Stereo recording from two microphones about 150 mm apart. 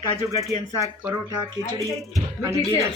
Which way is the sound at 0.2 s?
20° right (ahead or behind).